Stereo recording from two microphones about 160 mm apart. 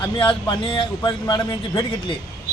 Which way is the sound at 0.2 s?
30° left (ahead or behind).